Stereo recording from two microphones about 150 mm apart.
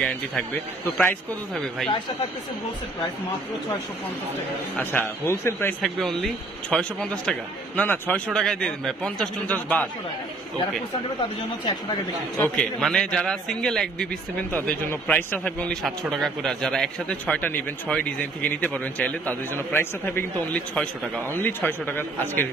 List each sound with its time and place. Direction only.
0.0 s a man's voice: 5° left (ahead or behind)
5.2 s a man's voice: 20° left (ahead or behind)
5.8 s speech: 5° left (ahead or behind)
12.4 s a man's voice: 10° left (ahead or behind)